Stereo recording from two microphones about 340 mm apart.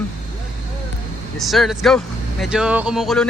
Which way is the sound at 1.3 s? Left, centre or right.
Centre.